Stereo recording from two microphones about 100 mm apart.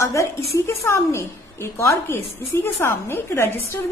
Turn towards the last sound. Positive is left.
turn(degrees=25)  # may be behind; listen again after turning